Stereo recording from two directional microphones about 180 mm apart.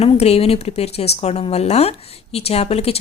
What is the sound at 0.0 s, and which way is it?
A woman's voice, 35° left (ahead or behind).